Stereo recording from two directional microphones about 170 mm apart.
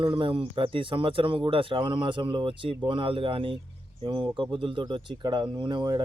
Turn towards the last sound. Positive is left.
turn(degrees=-25)  # may be behind; listen again after turning